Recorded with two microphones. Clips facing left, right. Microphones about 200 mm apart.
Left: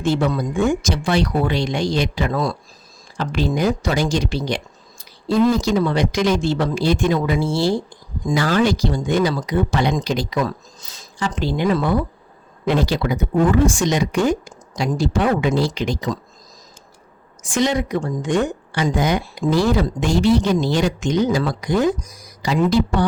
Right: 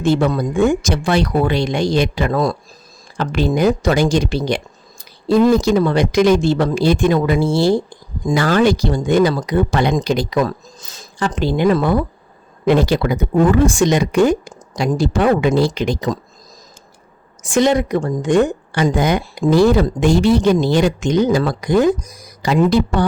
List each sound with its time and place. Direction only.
0.0 s a woman's voice: 55° right (ahead or behind)
17.4 s a woman's voice: 55° right (ahead or behind)